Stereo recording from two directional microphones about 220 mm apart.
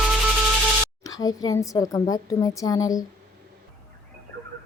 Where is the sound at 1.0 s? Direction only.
15° left (ahead or behind).